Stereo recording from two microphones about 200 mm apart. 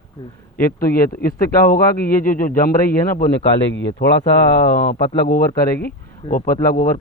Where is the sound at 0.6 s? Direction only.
50° left (ahead or behind).